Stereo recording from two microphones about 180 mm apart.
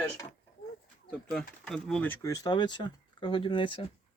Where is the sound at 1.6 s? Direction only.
5° left (ahead or behind).